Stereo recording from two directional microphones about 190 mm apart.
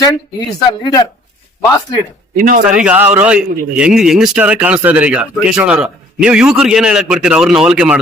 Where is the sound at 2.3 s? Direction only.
45° right (ahead or behind).